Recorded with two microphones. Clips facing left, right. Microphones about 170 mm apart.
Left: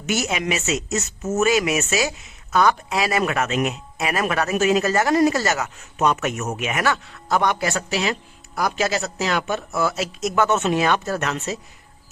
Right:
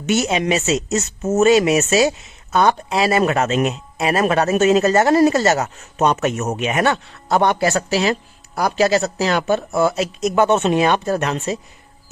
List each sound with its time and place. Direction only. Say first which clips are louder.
0.0 s speech: right 5 dB; 25° right (ahead or behind)
5.5 s speech: right 6 dB; 40° right (ahead or behind)
6.6 s speech: right 5 dB; 25° right (ahead or behind)